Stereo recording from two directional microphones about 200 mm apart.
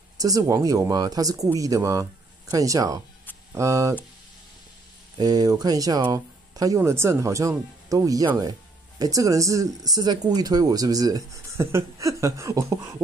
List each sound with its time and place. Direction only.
0.2 s speech: 15° right (ahead or behind)
5.1 s speech: 20° right (ahead or behind)